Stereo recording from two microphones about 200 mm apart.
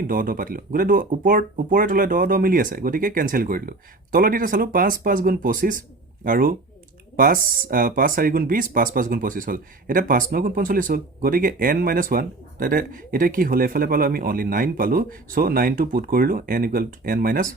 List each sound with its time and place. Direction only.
0.1 s speech: 45° right (ahead or behind)